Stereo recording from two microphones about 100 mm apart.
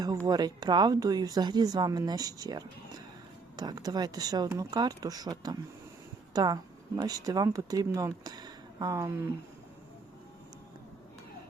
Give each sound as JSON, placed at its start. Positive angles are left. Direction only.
{"t": 0.3, "sound": "speech", "side_deg": -40}